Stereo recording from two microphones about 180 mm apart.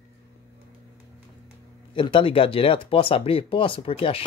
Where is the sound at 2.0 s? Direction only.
30° left (ahead or behind).